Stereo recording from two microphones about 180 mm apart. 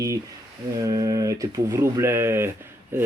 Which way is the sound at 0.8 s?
20° right (ahead or behind).